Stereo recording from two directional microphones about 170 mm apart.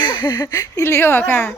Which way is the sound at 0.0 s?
30° left (ahead or behind).